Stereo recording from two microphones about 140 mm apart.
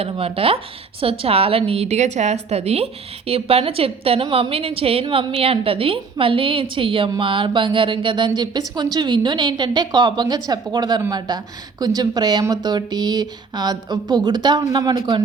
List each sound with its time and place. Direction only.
0.0 s a woman's voice: 40° right (ahead or behind)